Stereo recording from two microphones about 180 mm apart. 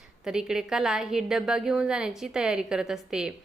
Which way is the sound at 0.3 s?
5° right (ahead or behind).